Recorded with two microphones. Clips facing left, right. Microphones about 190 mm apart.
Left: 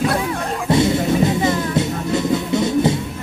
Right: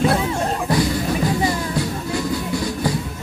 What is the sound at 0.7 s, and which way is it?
Music, 25° left (ahead or behind).